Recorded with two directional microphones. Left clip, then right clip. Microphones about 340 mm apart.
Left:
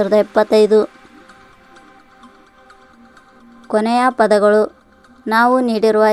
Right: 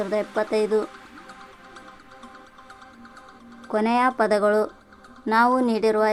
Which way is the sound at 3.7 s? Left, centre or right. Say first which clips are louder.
Left 6 dB; centre.